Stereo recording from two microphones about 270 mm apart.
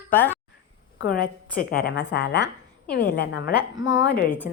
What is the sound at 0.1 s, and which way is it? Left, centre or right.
Speech, centre.